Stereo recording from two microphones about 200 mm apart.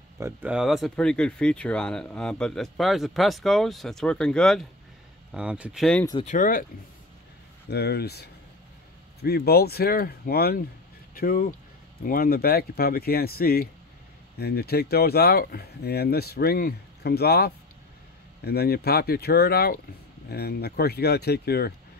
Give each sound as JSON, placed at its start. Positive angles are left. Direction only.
{"t": 0.2, "sound": "speech", "side_deg": -5}
{"t": 6.2, "sound": "speech", "side_deg": 40}
{"t": 7.7, "sound": "speech", "side_deg": 55}